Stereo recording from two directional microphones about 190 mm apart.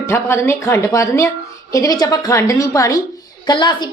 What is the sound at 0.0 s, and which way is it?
A woman's voice, 15° left (ahead or behind).